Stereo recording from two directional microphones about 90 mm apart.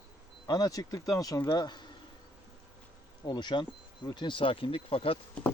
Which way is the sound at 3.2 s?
55° left (ahead or behind).